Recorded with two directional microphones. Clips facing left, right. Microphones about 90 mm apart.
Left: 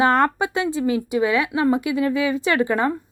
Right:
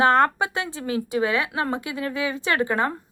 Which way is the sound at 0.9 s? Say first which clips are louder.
Right 1 dB; 30° right (ahead or behind).